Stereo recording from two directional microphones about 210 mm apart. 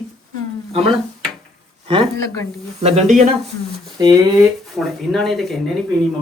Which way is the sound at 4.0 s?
15° right (ahead or behind).